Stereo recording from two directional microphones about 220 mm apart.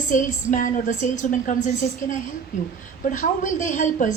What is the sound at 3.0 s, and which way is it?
A woman's voice, 35° left (ahead or behind).